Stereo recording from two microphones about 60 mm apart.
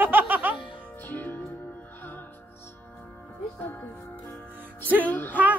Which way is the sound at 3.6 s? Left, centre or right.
Left.